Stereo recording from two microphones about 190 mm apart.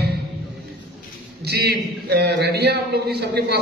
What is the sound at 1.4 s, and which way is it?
A man's voice, 60° right (ahead or behind).